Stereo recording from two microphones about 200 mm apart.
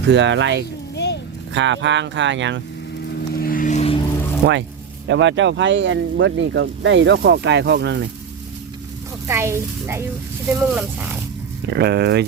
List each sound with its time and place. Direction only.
0.1 s speech: 65° right (ahead or behind)
0.9 s vehicle: 60° left (ahead or behind)
1.5 s speech: 65° right (ahead or behind)
3.3 s vehicle: 45° left (ahead or behind)
4.4 s speech: 60° right (ahead or behind)
9.2 s a woman's voice: 15° right (ahead or behind)
11.7 s speech: 55° right (ahead or behind)